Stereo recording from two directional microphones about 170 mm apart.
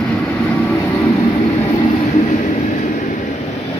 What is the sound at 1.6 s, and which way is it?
Train, 40° left (ahead or behind).